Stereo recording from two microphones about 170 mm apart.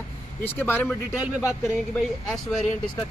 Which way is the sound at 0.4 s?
10° left (ahead or behind).